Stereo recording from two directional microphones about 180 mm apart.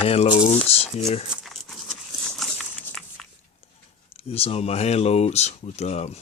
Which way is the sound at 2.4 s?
Centre (ahead or behind).